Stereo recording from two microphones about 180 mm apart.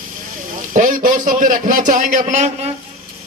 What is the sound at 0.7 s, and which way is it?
A man's voice, 45° right (ahead or behind).